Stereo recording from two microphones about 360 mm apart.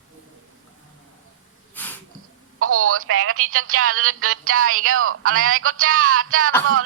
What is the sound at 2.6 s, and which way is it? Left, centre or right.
Speech, right.